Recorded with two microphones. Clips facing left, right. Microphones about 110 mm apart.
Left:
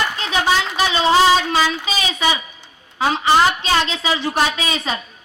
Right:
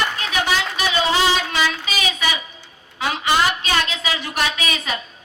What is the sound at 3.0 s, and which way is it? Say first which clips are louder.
A woman's voice: left 4 dB; 30° left (ahead or behind).